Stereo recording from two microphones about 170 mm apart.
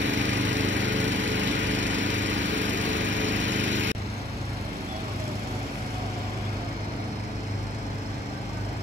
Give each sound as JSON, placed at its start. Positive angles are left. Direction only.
{"t": 0.0, "sound": "lawn mower", "side_deg": -90}